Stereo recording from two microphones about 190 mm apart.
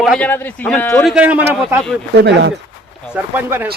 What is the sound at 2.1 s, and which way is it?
Speech, 60° right (ahead or behind).